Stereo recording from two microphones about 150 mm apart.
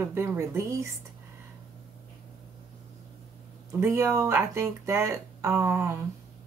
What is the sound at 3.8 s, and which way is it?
Speech, 15° right (ahead or behind).